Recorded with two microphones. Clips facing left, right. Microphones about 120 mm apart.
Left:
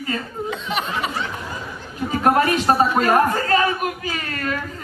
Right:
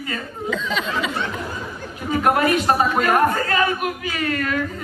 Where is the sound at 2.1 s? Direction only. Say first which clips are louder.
Even; 35° left (ahead or behind).